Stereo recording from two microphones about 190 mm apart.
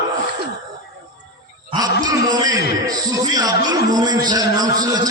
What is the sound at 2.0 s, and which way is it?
Music, 20° right (ahead or behind).